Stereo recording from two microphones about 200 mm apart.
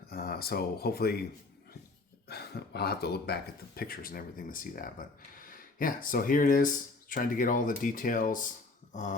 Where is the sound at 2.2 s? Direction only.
55° left (ahead or behind).